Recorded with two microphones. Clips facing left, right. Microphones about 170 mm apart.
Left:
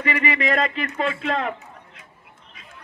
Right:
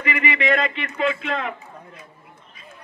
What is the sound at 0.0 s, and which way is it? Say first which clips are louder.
Speech: even; 35° left (ahead or behind).